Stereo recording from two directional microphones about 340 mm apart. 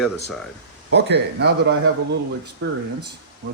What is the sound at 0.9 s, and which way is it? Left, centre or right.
Speech, right.